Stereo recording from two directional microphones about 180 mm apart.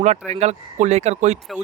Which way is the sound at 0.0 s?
40° right (ahead or behind).